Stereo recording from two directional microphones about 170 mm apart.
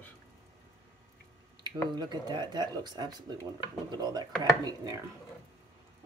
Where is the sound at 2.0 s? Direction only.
25° right (ahead or behind).